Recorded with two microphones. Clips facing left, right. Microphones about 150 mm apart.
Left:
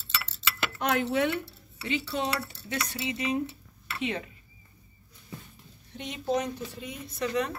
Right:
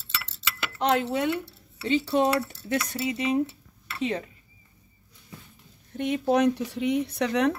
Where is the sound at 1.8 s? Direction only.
40° right (ahead or behind).